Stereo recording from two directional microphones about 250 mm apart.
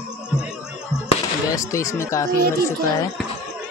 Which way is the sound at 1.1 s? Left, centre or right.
Centre.